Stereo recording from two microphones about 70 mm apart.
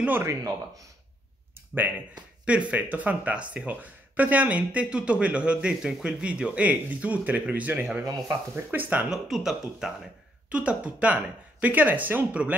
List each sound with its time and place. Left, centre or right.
0.2 s speech: right
1.8 s speech: right
9.1 s speech: centre
10.5 s speech: centre